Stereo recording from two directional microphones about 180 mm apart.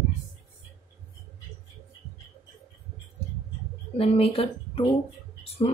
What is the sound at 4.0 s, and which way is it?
Speech, 30° left (ahead or behind).